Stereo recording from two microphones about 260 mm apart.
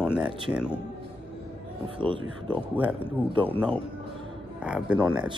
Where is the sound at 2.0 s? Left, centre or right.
Centre.